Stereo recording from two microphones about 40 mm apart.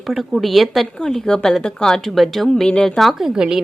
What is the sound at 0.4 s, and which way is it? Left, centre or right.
Speech, centre.